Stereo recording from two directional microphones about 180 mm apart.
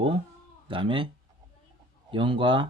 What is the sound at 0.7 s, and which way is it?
Speech, 30° right (ahead or behind).